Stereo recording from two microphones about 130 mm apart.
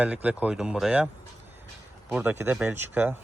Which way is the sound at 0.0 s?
10° right (ahead or behind).